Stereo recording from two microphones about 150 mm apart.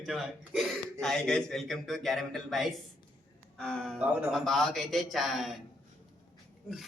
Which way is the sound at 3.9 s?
10° right (ahead or behind).